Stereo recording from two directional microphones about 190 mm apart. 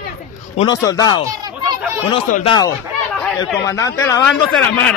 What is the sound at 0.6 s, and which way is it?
Speech, 20° left (ahead or behind).